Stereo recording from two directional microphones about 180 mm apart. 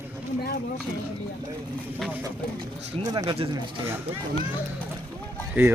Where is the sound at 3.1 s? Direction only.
25° right (ahead or behind).